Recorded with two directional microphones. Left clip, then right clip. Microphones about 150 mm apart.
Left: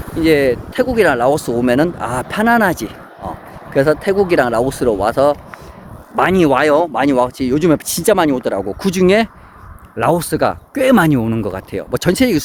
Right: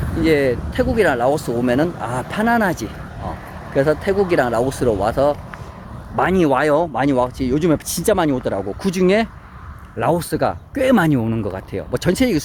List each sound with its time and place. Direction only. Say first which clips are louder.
0.2 s speech: left 4 dB; 40° left (ahead or behind)